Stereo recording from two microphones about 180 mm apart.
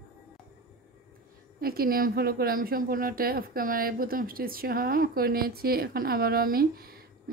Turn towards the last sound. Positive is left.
turn(degrees=-55)  # may be behind; listen again after turning